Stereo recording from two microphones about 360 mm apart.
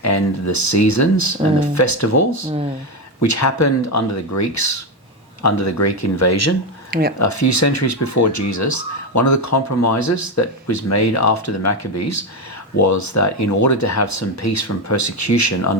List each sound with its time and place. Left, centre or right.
0.0 s speech: left